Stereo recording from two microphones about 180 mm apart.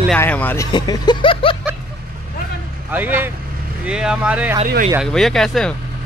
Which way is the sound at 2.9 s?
10° right (ahead or behind).